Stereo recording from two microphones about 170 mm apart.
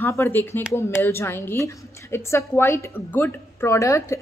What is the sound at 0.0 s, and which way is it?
A woman's voice, 15° left (ahead or behind).